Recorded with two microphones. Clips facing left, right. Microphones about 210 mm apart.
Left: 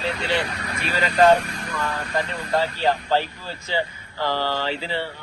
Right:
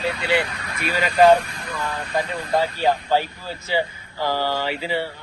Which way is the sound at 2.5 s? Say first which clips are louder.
Right 1 dB; 10° right (ahead or behind).